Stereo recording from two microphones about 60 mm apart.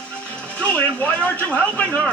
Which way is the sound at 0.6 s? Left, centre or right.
Left.